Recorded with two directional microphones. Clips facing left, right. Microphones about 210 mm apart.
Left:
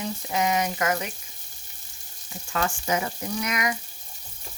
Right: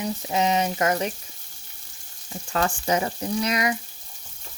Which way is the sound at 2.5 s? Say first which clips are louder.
Right 3 dB; 35° right (ahead or behind).